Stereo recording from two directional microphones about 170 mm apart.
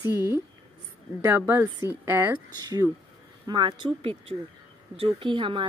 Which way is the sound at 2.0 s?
15° right (ahead or behind).